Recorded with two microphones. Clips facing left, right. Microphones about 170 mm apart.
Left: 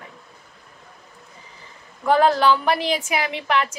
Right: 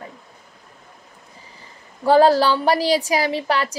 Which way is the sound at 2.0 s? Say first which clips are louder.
Right 3 dB; 35° right (ahead or behind).